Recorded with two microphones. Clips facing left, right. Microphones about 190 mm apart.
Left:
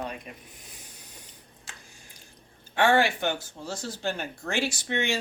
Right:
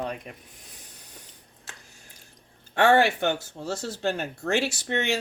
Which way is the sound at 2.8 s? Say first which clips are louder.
Right 3 dB; 65° right (ahead or behind).